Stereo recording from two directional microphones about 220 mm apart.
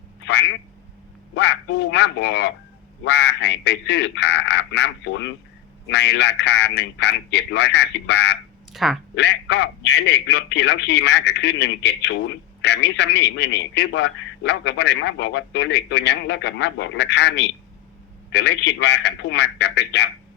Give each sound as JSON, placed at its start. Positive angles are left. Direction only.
{"t": 0.2, "sound": "telephone", "side_deg": 55}
{"t": 1.4, "sound": "a man's voice", "side_deg": 50}
{"t": 8.7, "sound": "speech", "side_deg": 0}
{"t": 9.1, "sound": "a man's voice", "side_deg": 50}